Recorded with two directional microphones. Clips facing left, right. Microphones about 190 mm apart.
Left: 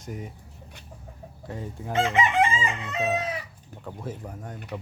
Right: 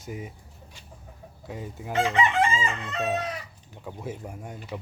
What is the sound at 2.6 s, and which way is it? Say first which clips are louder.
Crowing: left 1 dB; 10° left (ahead or behind).